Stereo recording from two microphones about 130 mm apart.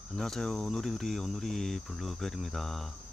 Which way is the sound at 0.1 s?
5° left (ahead or behind).